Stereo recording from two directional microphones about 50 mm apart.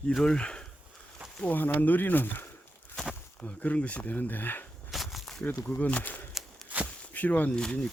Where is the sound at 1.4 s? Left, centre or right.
Left.